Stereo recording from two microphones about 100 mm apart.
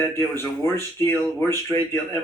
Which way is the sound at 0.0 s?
25° left (ahead or behind).